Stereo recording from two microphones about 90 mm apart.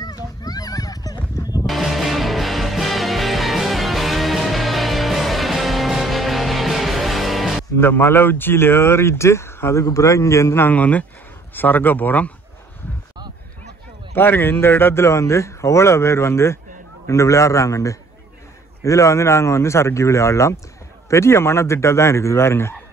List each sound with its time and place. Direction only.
0.0 s a sound: 45° left (ahead or behind)
1.7 s music: centre (ahead or behind)
7.7 s speech: 25° left (ahead or behind)
14.1 s speech: 25° left (ahead or behind)